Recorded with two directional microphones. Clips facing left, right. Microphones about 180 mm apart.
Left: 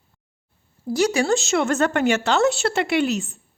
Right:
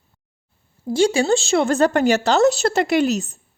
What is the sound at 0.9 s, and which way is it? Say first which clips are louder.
A woman's voice: right 3 dB; 25° right (ahead or behind).